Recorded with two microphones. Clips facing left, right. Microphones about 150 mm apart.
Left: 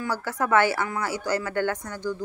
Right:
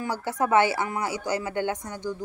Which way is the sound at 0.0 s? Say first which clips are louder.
Right 1 dB; 20° right (ahead or behind).